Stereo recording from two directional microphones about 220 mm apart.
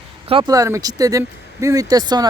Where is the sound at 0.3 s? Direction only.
20° right (ahead or behind).